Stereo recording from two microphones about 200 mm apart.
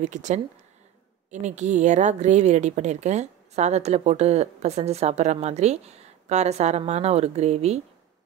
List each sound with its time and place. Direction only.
0.0 s speech: 35° right (ahead or behind)